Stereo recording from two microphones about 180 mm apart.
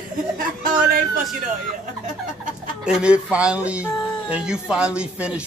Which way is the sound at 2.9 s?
5° right (ahead or behind).